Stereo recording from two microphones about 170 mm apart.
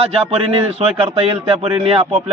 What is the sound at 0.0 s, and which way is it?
Speech, 35° right (ahead or behind).